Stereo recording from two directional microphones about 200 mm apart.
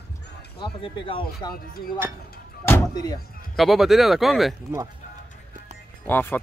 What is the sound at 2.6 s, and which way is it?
Speech, 15° left (ahead or behind).